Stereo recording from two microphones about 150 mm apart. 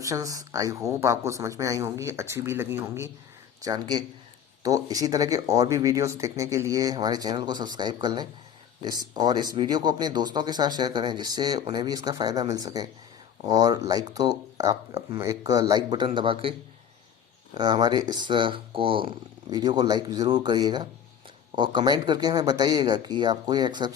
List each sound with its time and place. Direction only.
0.0 s speech: 20° right (ahead or behind)